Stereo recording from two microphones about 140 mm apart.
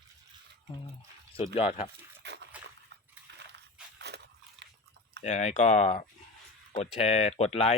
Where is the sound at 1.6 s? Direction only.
45° left (ahead or behind).